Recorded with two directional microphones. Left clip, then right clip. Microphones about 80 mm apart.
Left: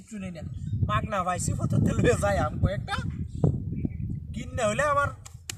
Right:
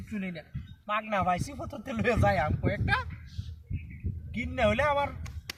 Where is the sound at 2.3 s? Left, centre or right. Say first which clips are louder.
Left 1 dB; left.